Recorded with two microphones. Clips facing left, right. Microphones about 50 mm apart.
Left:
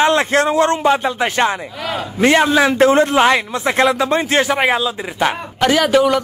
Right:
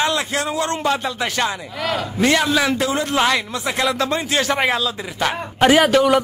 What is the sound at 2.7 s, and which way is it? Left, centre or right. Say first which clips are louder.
Speech: left 9 dB; left.